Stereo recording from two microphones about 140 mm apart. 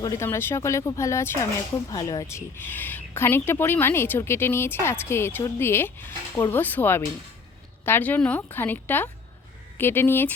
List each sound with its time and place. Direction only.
0.0 s speech: 20° left (ahead or behind)